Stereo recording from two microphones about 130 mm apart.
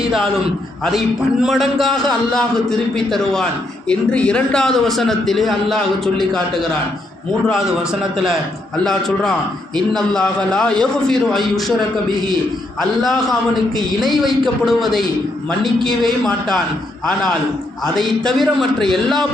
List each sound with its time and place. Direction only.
0.9 s a man's voice: centre (ahead or behind)
8.8 s a man's voice: 5° left (ahead or behind)
13.7 s a man's voice: centre (ahead or behind)
17.9 s a man's voice: centre (ahead or behind)